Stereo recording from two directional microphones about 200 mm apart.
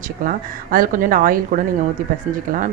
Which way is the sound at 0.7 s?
45° right (ahead or behind).